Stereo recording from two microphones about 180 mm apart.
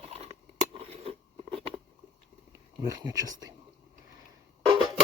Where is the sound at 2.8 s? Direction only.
20° right (ahead or behind).